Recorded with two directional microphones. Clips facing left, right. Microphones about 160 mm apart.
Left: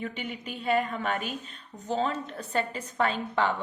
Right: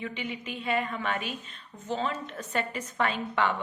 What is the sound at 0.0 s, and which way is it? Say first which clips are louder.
A woman's voice: even; 45° left (ahead or behind).